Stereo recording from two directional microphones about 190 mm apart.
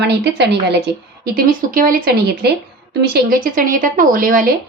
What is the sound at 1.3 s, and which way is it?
Speech, 50° right (ahead or behind).